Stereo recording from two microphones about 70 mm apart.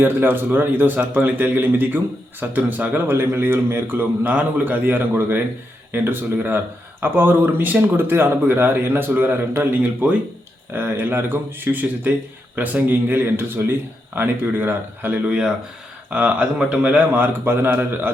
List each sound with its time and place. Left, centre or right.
0.0 s speech: right
15.3 s speech: centre; by 18.1 s right